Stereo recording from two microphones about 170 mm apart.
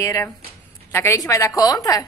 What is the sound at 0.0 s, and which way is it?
A woman's voice, 20° left (ahead or behind).